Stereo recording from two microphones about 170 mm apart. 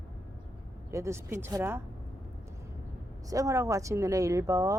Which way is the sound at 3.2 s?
20° right (ahead or behind).